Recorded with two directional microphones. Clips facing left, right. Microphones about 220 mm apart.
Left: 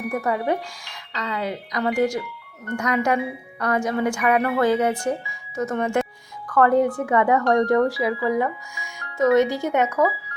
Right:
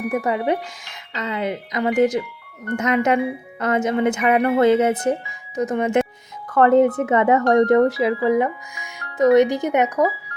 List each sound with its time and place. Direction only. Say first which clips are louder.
0.1 s a woman's voice: right 2 dB; 20° right (ahead or behind)